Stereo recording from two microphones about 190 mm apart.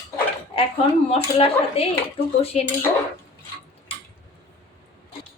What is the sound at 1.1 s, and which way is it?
Speech, 30° left (ahead or behind).